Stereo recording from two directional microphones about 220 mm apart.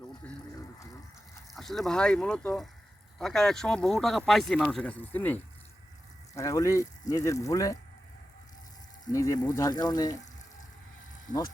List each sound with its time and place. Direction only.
0.2 s pump: 5° left (ahead or behind)
1.5 s speech: centre (ahead or behind)
9.1 s speech: 15° left (ahead or behind)
11.3 s speech: 35° left (ahead or behind)